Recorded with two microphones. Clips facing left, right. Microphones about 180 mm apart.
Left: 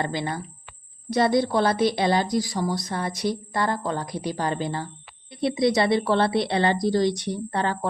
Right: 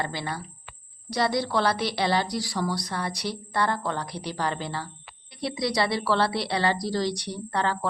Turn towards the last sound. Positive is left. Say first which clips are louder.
# left 1 dB
turn(degrees=20)  # may be behind; listen again after turning